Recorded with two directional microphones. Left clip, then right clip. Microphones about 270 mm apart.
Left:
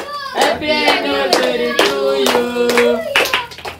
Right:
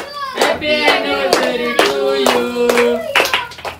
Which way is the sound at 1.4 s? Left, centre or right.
Centre.